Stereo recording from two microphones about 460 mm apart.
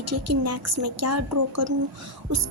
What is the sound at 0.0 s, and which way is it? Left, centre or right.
A woman's voice, right.